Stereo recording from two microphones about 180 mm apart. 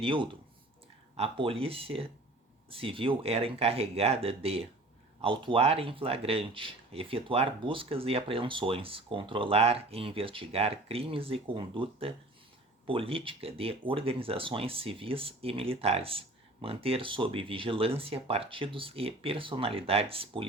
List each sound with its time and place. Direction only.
0.0 s speech: 30° right (ahead or behind)